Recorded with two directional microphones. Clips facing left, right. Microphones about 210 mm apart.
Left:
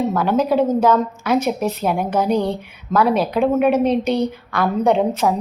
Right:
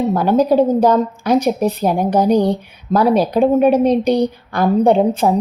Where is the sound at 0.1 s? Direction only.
35° right (ahead or behind).